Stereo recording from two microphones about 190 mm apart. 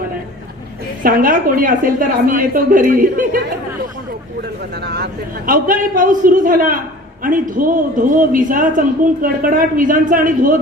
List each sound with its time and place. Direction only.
1.0 s a woman's voice: 45° right (ahead or behind)
5.5 s a woman's voice: 45° right (ahead or behind)